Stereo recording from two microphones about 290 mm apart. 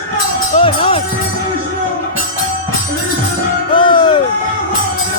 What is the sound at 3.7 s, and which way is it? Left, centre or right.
Music, centre.